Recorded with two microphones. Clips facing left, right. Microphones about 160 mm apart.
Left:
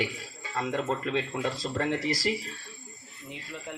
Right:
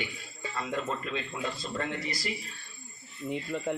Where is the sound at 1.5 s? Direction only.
90° left.